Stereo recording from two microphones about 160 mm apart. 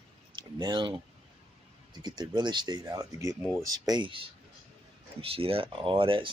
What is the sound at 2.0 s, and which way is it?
Speech, 25° right (ahead or behind).